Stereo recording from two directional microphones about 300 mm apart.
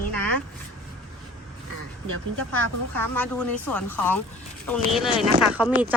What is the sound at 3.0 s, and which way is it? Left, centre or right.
A woman's voice, centre.